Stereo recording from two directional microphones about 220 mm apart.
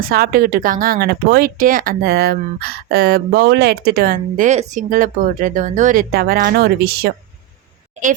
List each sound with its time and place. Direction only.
0.0 s speech: 45° right (ahead or behind)